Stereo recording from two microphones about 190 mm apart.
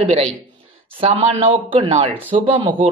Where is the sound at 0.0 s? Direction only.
30° right (ahead or behind).